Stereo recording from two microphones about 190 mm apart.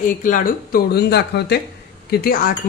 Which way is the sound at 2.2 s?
50° left (ahead or behind).